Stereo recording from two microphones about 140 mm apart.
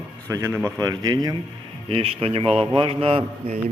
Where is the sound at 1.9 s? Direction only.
40° right (ahead or behind).